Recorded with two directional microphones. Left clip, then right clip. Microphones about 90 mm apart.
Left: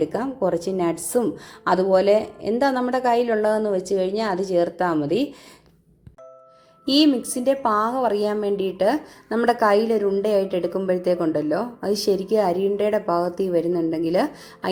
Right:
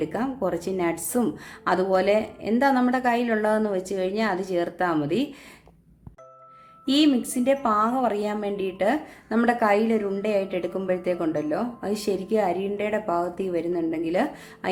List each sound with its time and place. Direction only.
0.0 s a woman's voice: 20° left (ahead or behind)
6.8 s a woman's voice: 25° left (ahead or behind)